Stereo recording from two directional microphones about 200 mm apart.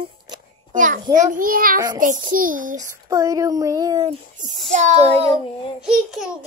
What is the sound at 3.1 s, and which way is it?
Speech, 15° right (ahead or behind).